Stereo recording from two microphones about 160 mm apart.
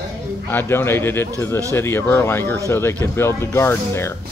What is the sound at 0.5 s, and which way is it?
Speech, 15° left (ahead or behind).